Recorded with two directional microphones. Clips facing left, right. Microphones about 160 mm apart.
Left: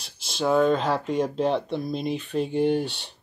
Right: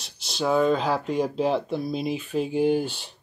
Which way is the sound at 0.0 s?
Centre (ahead or behind).